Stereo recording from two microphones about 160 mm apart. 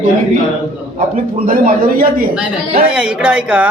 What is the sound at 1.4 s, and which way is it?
Speech, 60° right (ahead or behind).